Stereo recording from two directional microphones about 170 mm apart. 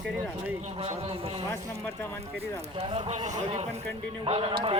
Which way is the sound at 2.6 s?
35° right (ahead or behind).